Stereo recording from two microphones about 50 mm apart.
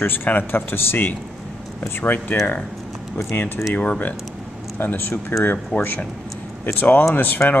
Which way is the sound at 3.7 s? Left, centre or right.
Left.